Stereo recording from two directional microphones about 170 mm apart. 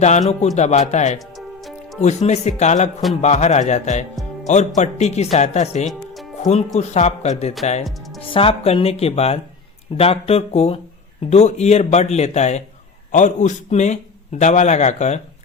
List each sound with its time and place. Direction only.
0.0 s a man's voice: 40° left (ahead or behind)
1.4 s music: centre (ahead or behind)
2.0 s a man's voice: 40° left (ahead or behind)